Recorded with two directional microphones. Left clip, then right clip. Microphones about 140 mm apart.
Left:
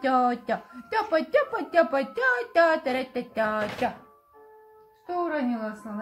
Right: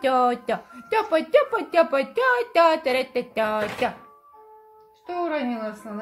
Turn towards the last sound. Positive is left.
turn(degrees=-90)